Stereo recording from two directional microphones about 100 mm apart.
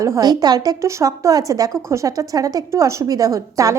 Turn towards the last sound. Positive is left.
turn(degrees=-35)  # may be behind; listen again after turning